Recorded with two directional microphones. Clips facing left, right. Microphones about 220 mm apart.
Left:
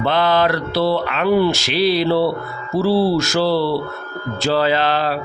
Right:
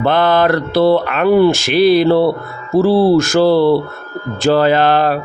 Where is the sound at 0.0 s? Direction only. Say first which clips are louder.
Right 4 dB; 50° right (ahead or behind).